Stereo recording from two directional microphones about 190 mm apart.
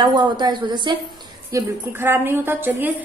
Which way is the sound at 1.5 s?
10° right (ahead or behind).